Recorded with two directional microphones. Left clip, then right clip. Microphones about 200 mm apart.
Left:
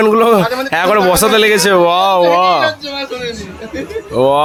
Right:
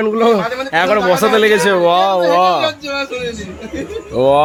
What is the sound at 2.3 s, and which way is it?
Music, centre (ahead or behind).